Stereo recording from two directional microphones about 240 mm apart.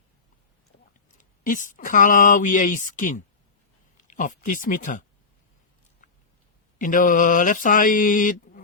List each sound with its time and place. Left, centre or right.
1.0 s speech: left
4.0 s mantra: left
6.7 s mantra: left